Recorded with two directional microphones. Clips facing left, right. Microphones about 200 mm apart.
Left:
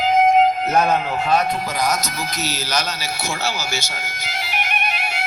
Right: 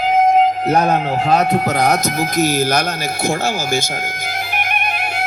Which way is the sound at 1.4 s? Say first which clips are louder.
Right 6 dB; 65° right (ahead or behind).